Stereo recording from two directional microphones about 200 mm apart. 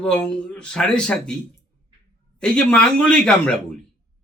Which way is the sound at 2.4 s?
5° left (ahead or behind).